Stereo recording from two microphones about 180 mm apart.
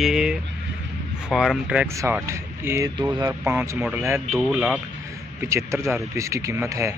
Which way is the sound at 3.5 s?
10° right (ahead or behind).